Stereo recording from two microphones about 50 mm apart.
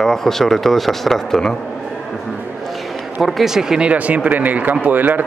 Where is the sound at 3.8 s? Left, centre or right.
Right.